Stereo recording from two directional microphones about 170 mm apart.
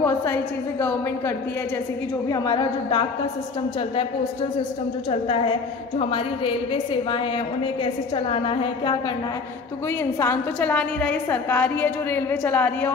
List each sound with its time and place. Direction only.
0.0 s a woman's voice: 15° left (ahead or behind)
2.2 s a woman's voice: 25° left (ahead or behind)
5.9 s a woman's voice: 35° left (ahead or behind)
10.1 s a woman's voice: 15° left (ahead or behind)